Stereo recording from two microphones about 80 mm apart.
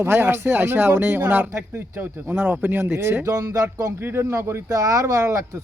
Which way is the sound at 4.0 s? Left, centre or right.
Right.